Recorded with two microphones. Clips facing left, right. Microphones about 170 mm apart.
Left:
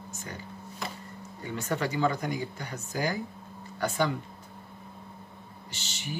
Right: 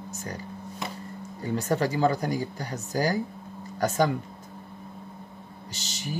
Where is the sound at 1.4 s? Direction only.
35° right (ahead or behind).